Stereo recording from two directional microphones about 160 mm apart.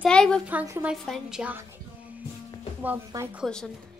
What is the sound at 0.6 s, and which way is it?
Speech, 15° right (ahead or behind).